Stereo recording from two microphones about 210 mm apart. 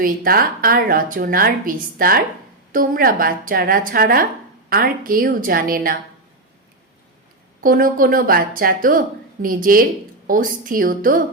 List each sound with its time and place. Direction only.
0.0 s a woman's voice: 45° right (ahead or behind)
7.6 s a woman's voice: 40° right (ahead or behind)